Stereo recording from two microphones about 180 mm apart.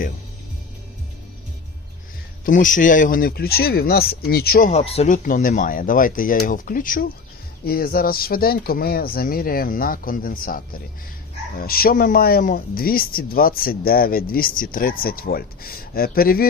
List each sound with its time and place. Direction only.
2.4 s speech: 45° left (ahead or behind)
4.7 s speech: 35° left (ahead or behind); by 10.6 s 50° left (ahead or behind)
11.6 s speech: 55° left (ahead or behind)